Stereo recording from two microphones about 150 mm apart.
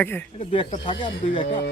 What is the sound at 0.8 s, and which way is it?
Speech, 35° left (ahead or behind).